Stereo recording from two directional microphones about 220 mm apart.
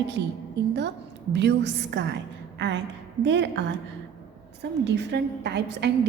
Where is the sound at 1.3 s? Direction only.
50° right (ahead or behind).